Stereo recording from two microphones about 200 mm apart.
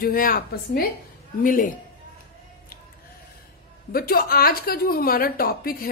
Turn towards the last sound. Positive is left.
turn(degrees=45)  # may be behind; listen again after turning